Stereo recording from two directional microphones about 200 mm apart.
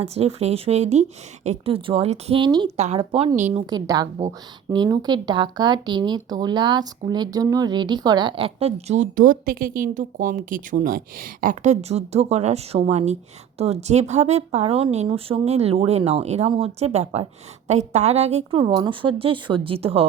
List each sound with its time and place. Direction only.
0.0 s speech: 30° right (ahead or behind)
3.7 s speech: 20° right (ahead or behind)
18.6 s speech: 20° right (ahead or behind)